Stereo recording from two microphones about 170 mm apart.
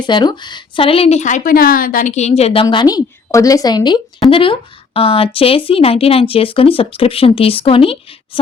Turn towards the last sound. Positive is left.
turn(degrees=35)  # may be behind; listen again after turning